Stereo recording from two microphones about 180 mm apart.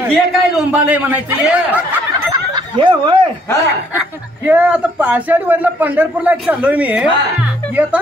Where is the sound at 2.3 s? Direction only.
25° right (ahead or behind).